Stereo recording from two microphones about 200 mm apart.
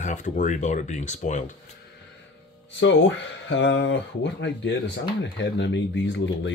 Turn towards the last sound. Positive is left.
turn(degrees=60)  # may be behind; listen again after turning